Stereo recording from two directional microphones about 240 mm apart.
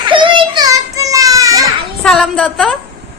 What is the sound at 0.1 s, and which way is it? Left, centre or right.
Children playing, centre.